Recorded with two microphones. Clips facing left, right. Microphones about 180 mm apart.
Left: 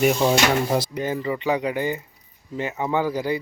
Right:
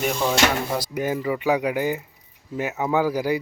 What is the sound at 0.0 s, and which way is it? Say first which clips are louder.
Speech: left 5 dB; 15° left (ahead or behind).